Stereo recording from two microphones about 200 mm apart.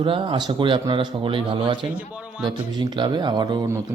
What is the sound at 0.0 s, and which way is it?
Speech, 25° right (ahead or behind).